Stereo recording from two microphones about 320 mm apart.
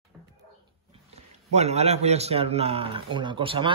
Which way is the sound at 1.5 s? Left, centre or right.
Centre.